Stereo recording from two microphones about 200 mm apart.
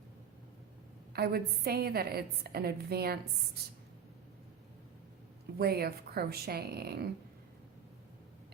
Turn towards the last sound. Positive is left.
turn(degrees=-50)  # may be behind; listen again after turning